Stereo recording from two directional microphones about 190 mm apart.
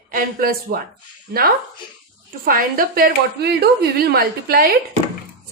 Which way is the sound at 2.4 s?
50° right (ahead or behind).